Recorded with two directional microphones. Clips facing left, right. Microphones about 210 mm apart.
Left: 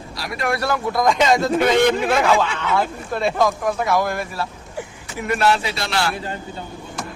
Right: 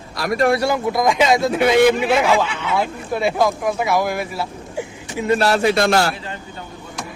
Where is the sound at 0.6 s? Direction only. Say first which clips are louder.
Right 2 dB; 15° right (ahead or behind).